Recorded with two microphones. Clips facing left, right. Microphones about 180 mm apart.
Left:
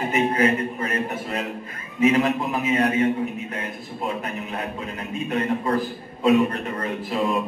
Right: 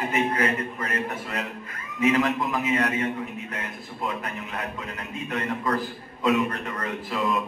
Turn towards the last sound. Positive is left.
turn(degrees=30)  # may be behind; listen again after turning